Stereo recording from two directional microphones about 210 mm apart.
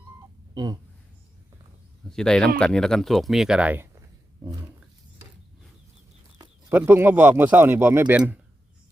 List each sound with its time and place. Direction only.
0.5 s a sound: 20° right (ahead or behind)
2.0 s speech: 5° left (ahead or behind)
6.7 s speech: 10° right (ahead or behind)